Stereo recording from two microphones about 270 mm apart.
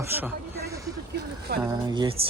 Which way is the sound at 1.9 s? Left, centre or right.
Centre.